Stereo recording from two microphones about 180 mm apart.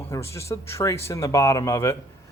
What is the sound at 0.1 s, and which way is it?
Speech, 15° left (ahead or behind).